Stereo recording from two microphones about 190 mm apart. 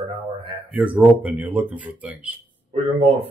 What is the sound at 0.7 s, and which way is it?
Speech, 10° right (ahead or behind).